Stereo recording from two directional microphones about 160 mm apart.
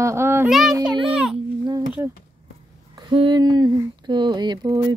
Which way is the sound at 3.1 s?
30° right (ahead or behind).